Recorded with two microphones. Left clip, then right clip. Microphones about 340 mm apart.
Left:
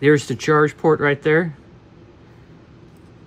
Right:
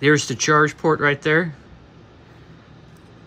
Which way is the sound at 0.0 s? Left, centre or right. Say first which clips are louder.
Left 1 dB; centre.